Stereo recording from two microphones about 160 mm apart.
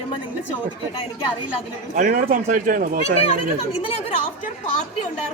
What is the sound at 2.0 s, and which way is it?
Speech, 60° right (ahead or behind).